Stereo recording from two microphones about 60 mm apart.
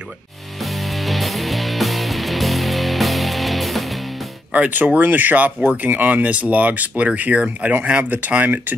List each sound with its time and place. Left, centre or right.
0.7 s music: centre
4.5 s speech: right